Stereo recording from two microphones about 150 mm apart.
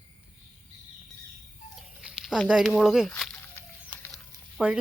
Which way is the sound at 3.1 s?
5° left (ahead or behind).